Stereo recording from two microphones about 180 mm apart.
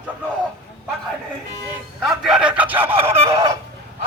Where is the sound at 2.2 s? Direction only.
5° right (ahead or behind).